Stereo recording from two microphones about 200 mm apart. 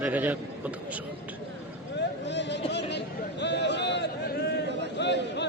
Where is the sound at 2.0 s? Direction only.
60° left (ahead or behind).